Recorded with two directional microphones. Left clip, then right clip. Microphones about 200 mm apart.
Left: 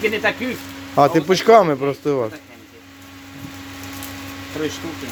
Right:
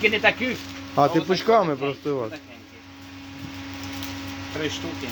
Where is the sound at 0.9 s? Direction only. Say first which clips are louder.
Left 5 dB; 20° left (ahead or behind).